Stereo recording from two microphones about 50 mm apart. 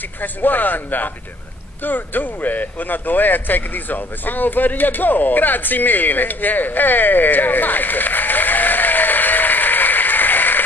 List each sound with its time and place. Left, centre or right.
0.2 s speech: left